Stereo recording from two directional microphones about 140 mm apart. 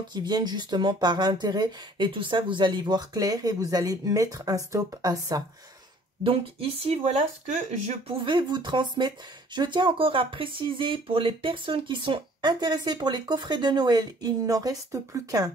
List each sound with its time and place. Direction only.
0.1 s speech: 30° right (ahead or behind)
6.2 s speech: 45° right (ahead or behind); by 8.0 s 60° right (ahead or behind)
8.3 s speech: 35° right (ahead or behind)